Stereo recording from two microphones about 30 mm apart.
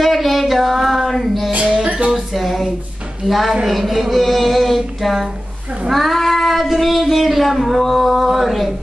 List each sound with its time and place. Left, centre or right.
0.0 s a sound: centre
1.9 s music: right
2.1 s a sound: centre
3.3 s music: centre
5.9 s child singing: centre
6.8 s music: centre